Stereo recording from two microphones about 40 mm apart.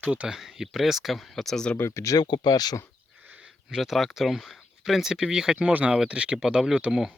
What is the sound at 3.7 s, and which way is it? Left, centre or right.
Speech, centre.